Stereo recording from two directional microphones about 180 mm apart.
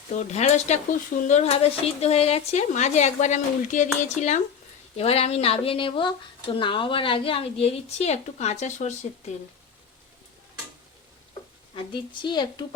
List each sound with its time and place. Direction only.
0.1 s speech: 40° left (ahead or behind)
12.2 s speech: 25° left (ahead or behind)